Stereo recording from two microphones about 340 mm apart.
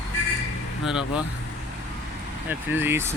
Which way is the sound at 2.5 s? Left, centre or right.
Centre.